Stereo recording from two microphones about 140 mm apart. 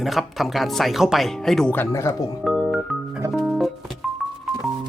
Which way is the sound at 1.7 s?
15° left (ahead or behind).